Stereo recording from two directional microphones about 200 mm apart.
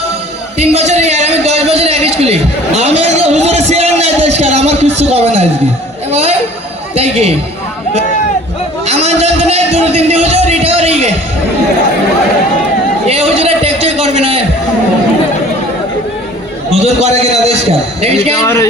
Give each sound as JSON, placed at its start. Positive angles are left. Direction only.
{"t": 0.6, "sound": "a sound", "side_deg": -30}
{"t": 6.1, "sound": "a man's voice", "side_deg": -30}
{"t": 8.9, "sound": "a man's voice", "side_deg": -30}
{"t": 13.1, "sound": "a sound", "side_deg": -30}
{"t": 16.7, "sound": "a man's voice", "side_deg": -35}
{"t": 18.3, "sound": "speech", "side_deg": 15}